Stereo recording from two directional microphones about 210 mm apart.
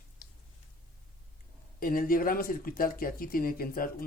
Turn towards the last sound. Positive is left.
turn(degrees=45)  # may be behind; listen again after turning